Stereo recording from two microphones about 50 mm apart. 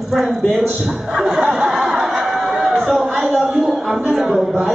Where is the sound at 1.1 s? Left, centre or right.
Centre.